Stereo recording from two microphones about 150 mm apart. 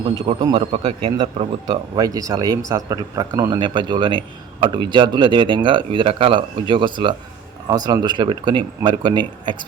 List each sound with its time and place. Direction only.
0.0 s a man's voice: 35° right (ahead or behind)